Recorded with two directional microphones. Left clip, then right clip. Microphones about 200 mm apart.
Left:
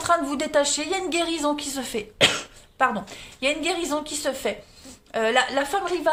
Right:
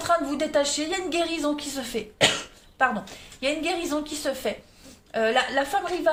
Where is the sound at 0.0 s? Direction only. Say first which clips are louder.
Left 1 dB; 40° left (ahead or behind).